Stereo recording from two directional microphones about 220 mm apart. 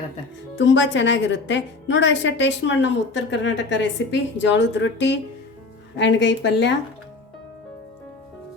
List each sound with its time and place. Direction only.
0.6 s a woman's voice: 55° left (ahead or behind)